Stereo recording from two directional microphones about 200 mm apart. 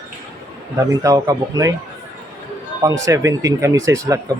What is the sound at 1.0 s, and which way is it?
Speech, 20° right (ahead or behind).